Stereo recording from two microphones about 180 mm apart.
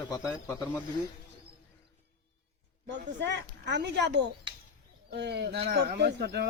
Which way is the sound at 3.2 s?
75° right (ahead or behind).